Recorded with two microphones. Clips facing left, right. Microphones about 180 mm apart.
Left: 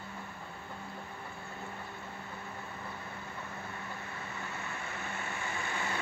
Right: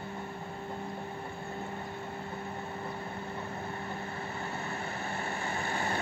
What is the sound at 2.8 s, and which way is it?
Vehicle, 35° right (ahead or behind).